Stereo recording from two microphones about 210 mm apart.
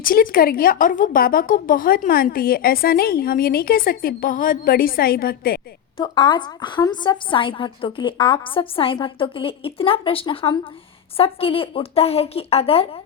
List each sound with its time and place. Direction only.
0.0 s a woman's voice: 45° left (ahead or behind)
6.0 s a woman's voice: 25° left (ahead or behind)